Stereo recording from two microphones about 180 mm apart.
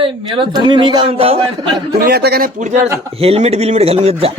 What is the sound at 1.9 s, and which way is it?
Speech, 55° right (ahead or behind).